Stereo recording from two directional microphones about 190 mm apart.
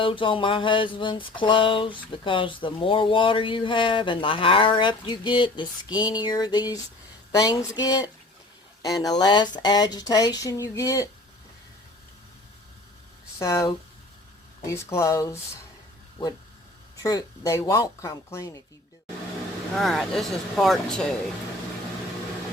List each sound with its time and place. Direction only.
0.0 s a sound: 25° left (ahead or behind)
13.4 s speech: 15° left (ahead or behind)
17.0 s speech: 20° left (ahead or behind)
19.7 s speech: centre (ahead or behind)